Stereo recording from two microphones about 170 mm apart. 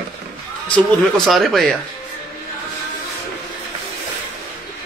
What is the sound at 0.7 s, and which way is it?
A man's voice, centre (ahead or behind).